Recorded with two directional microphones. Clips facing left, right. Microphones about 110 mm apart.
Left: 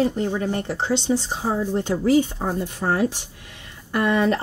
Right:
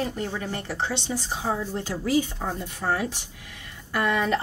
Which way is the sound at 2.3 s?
40° left (ahead or behind).